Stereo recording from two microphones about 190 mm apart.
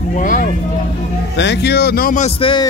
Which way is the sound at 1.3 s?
65° left (ahead or behind).